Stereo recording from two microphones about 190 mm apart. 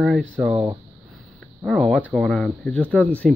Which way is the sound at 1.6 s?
Centre (ahead or behind).